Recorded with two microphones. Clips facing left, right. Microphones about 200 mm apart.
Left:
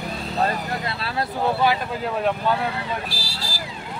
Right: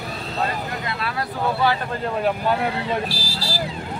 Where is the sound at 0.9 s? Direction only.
30° left (ahead or behind).